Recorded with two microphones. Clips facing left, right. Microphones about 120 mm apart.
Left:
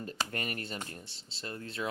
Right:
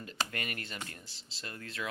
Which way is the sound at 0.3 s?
35° left (ahead or behind).